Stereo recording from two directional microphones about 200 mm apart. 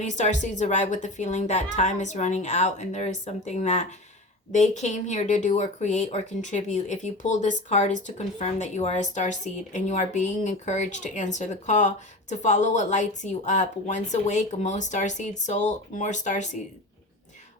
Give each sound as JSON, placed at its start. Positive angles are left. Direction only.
{"t": 0.0, "sound": "speech", "side_deg": 35}